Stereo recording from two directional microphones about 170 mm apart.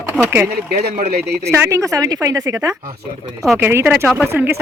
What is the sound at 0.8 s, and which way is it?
Speech, 65° right (ahead or behind).